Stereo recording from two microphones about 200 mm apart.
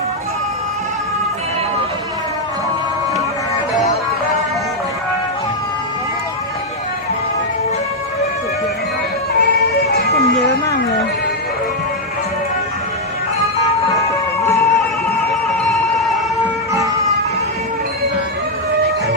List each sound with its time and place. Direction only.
9.8 s a sound: 55° left (ahead or behind)
14.4 s music: 15° left (ahead or behind)
15.6 s music: centre (ahead or behind)